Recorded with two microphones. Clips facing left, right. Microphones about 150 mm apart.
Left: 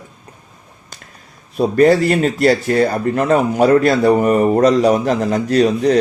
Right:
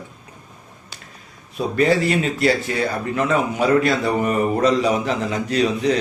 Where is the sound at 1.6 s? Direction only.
45° left (ahead or behind).